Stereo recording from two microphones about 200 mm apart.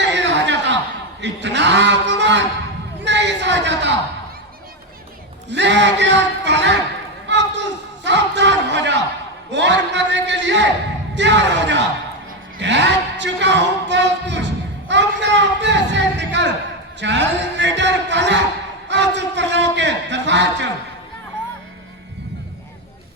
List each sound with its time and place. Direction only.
0.0 s a sound: 60° right (ahead or behind)
1.2 s cattle: 60° right (ahead or behind)
3.0 s a man's voice: 60° right (ahead or behind)
5.5 s a man's voice: 60° right (ahead or behind)
7.3 s a sound: 60° right (ahead or behind)
9.5 s a man's voice: 60° right (ahead or behind)